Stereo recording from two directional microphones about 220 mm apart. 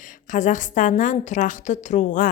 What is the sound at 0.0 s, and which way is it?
A woman's voice, 35° left (ahead or behind).